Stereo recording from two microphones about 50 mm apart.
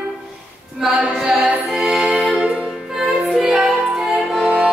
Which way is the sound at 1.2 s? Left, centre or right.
Centre.